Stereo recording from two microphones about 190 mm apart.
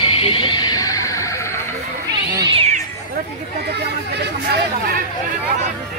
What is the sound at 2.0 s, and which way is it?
Cat, 20° right (ahead or behind).